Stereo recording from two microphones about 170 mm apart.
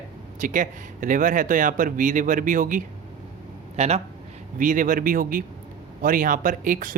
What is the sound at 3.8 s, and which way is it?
Speech, 40° right (ahead or behind).